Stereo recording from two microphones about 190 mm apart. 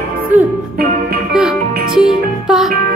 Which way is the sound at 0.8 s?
55° right (ahead or behind).